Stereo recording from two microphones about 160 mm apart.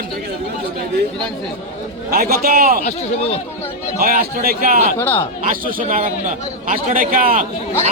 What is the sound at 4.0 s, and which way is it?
A man's voice, 65° right (ahead or behind).